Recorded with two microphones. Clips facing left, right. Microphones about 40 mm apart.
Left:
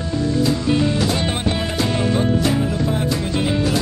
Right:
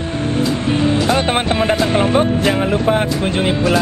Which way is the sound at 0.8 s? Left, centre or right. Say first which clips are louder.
Right 4 dB; right.